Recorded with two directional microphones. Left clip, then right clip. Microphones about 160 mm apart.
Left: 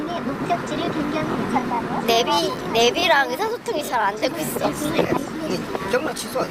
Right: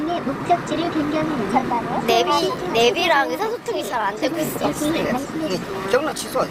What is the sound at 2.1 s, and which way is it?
Speech, centre (ahead or behind).